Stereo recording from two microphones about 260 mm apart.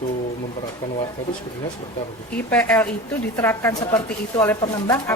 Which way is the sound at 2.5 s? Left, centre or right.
Centre.